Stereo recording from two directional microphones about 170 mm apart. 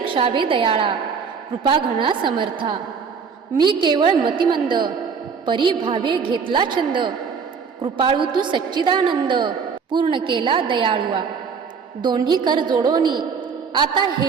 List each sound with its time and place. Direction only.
0.0 s a woman's voice: 30° right (ahead or behind)